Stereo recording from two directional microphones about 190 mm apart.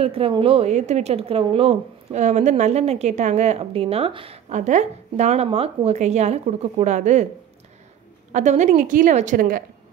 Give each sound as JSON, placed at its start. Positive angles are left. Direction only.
{"t": 0.0, "sound": "speech", "side_deg": -30}
{"t": 8.3, "sound": "speech", "side_deg": -40}